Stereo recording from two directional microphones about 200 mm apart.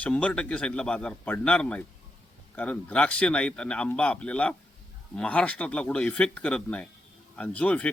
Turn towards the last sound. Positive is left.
turn(degrees=5)  # may be behind; listen again after turning